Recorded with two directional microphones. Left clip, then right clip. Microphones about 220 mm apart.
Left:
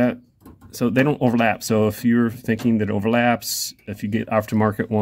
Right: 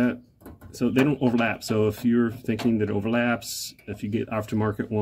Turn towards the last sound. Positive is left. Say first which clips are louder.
# left 6 dB
turn(degrees=55)  # may be behind; listen again after turning